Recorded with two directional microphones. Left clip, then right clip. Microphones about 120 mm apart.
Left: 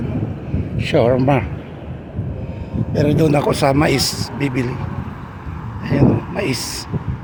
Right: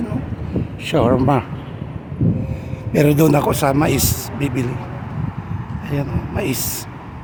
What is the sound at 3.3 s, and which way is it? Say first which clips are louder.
Speech: left 1 dB; 10° right (ahead or behind).